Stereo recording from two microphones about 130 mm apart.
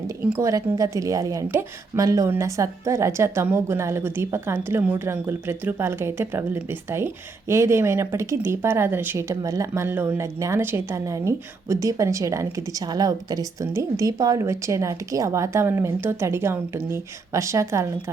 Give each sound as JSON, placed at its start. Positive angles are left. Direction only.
{"t": 0.3, "sound": "a woman's voice", "side_deg": -25}